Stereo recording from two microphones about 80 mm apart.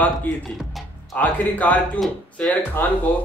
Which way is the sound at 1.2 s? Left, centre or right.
Centre.